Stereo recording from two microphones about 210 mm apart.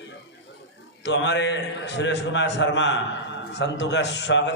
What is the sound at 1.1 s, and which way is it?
A man's voice, 55° left (ahead or behind).